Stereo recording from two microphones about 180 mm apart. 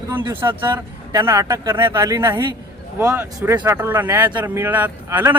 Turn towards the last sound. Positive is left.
turn(degrees=-10)  # may be behind; listen again after turning